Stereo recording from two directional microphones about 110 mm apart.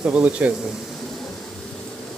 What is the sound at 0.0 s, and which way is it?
Speech, 10° right (ahead or behind).